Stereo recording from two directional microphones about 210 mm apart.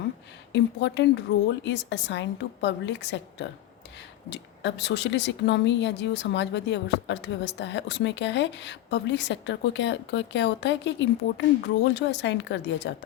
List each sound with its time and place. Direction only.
0.5 s speech: 60° left (ahead or behind)